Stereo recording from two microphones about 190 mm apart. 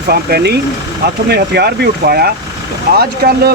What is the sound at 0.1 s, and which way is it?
Speech, 55° right (ahead or behind).